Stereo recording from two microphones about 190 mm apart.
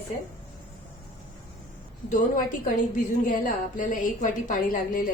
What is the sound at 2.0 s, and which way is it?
A woman's voice, 45° left (ahead or behind).